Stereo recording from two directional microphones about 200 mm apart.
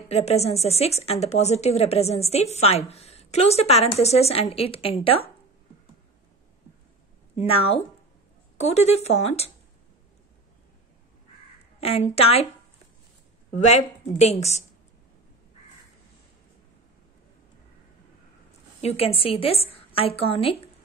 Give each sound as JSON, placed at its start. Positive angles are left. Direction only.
{"t": 0.1, "sound": "speech", "side_deg": 30}
{"t": 7.3, "sound": "a woman's voice", "side_deg": 30}
{"t": 11.8, "sound": "speech", "side_deg": 30}
{"t": 13.6, "sound": "speech", "side_deg": 35}
{"t": 18.8, "sound": "a woman's voice", "side_deg": 30}